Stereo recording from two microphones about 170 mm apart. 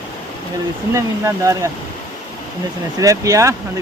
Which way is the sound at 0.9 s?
20° right (ahead or behind).